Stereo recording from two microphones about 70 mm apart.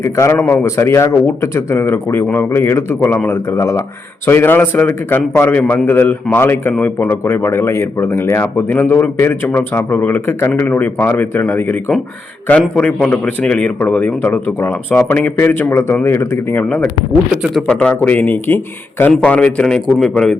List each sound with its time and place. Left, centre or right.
0.0 s a man's voice: left
3.6 s a man's voice: left
4.3 s speech: left
7.1 s speech: left
12.5 s a man's voice: centre; by 16.6 s left
17.7 s a man's voice: centre
18.0 s speech: left
19.2 s a man's voice: centre